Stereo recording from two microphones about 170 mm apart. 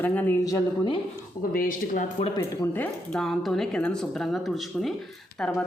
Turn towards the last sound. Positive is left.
turn(degrees=5)  # may be behind; listen again after turning